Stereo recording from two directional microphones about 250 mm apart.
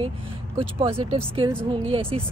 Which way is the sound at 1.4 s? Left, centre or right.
Centre.